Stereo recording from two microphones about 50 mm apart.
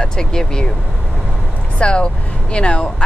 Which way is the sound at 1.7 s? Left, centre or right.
Left.